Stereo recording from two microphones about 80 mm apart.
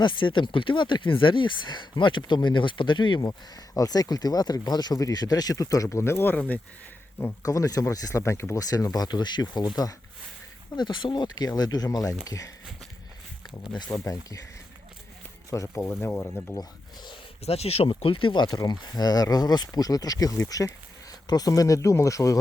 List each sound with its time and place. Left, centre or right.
0.0 s speech: left
3.2 s speech: left
7.4 s speech: left
8.7 s speech: left
13.9 s speech: left
15.4 s speech: left
15.8 s speech: left
16.6 s a sound: left
17.8 s speech: left
18.4 s speech: left